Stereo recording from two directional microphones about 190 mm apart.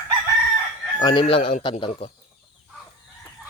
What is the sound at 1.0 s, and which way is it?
Speech, 25° left (ahead or behind).